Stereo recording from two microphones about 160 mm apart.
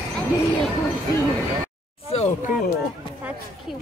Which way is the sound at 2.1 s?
40° left (ahead or behind).